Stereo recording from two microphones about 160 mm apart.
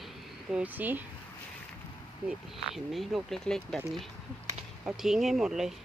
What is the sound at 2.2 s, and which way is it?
Speech, 5° right (ahead or behind).